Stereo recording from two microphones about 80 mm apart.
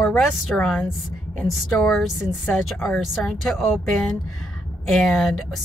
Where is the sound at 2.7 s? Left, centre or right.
Left.